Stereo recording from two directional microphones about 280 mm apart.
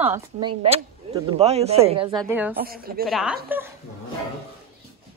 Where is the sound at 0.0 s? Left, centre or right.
Centre.